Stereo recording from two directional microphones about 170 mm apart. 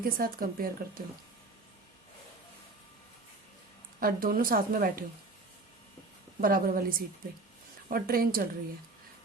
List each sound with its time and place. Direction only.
0.0 s speech: 60° right (ahead or behind)
4.0 s speech: 60° right (ahead or behind)
6.4 s speech: 55° right (ahead or behind)